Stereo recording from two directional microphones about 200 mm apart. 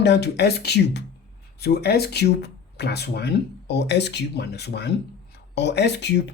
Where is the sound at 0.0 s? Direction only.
60° left (ahead or behind).